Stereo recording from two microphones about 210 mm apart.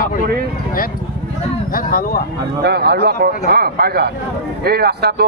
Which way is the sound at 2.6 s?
50° right (ahead or behind).